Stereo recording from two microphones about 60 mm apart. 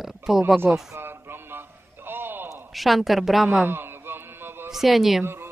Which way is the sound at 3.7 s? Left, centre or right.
Right.